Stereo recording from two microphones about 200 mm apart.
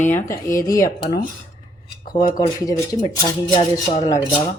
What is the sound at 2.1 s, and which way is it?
Speech, 20° left (ahead or behind).